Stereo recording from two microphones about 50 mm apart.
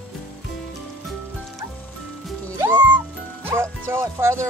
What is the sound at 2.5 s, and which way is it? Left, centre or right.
Music, right.